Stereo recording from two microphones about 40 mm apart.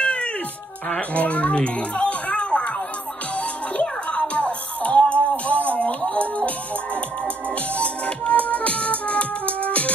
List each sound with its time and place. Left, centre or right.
0.0 s music: left
0.8 s a child's voice: left
4.1 s music: left
7.7 s music: left